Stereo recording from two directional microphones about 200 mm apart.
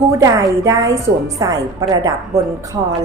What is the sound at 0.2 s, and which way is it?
A woman's voice, 15° right (ahead or behind).